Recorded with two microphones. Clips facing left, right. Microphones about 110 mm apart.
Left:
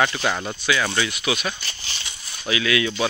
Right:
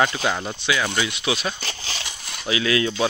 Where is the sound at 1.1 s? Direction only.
25° right (ahead or behind).